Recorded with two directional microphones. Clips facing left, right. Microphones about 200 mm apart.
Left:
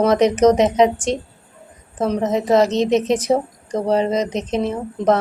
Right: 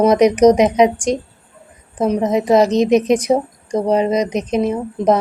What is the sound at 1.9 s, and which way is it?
A woman's voice, 15° right (ahead or behind).